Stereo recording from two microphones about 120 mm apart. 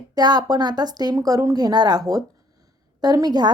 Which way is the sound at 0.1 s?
35° right (ahead or behind).